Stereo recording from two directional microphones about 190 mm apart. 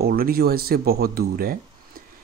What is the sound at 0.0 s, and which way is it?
Speech, 50° right (ahead or behind).